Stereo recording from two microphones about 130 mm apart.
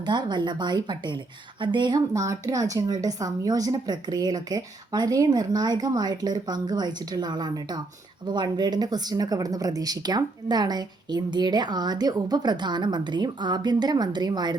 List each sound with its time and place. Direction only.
0.0 s speech: 35° right (ahead or behind)